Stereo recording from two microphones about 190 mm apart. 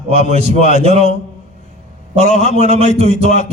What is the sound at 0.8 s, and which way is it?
Speech, 35° right (ahead or behind).